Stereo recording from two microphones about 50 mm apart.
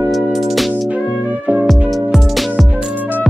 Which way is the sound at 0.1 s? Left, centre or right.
Centre.